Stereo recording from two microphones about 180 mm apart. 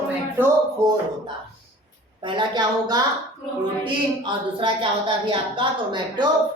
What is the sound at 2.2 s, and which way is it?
Speech, 25° right (ahead or behind).